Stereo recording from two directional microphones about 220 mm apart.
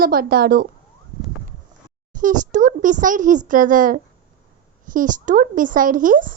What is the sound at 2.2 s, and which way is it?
A woman's voice, 35° right (ahead or behind).